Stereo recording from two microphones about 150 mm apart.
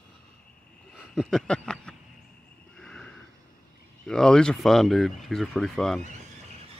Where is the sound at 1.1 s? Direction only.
5° left (ahead or behind).